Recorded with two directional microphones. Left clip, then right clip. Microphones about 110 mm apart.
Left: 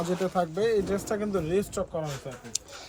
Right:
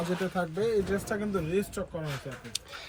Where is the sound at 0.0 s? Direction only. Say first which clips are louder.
Left 4 dB; 45° left (ahead or behind).